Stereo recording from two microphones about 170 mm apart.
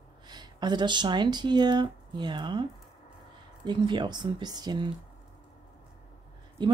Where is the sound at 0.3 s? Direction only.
25° right (ahead or behind).